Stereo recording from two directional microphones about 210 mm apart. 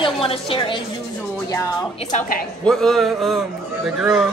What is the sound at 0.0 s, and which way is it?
A woman's voice, 25° left (ahead or behind).